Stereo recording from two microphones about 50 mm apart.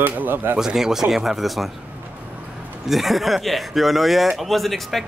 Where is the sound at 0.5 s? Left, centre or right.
Centre.